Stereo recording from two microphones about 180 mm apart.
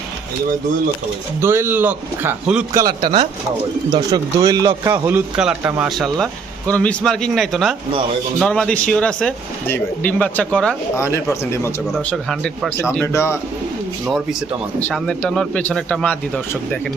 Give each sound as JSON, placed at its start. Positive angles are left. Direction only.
{"t": 1.4, "sound": "speech", "side_deg": -15}
{"t": 2.7, "sound": "speech", "side_deg": -20}
{"t": 5.4, "sound": "speech", "side_deg": -5}
{"t": 6.7, "sound": "speech", "side_deg": 5}
{"t": 12.1, "sound": "speech", "side_deg": 0}
{"t": 12.9, "sound": "speech", "side_deg": 15}
{"t": 14.8, "sound": "speech", "side_deg": 5}